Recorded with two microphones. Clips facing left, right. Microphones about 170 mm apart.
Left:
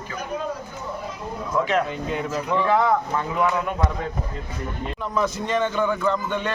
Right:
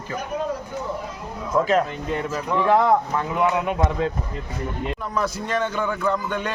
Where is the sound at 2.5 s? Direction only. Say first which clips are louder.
Right 3 dB; 10° right (ahead or behind).